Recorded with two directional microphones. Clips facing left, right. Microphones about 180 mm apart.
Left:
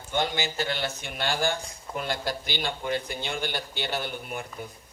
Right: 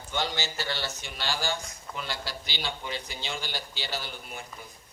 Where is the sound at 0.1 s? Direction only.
55° left (ahead or behind).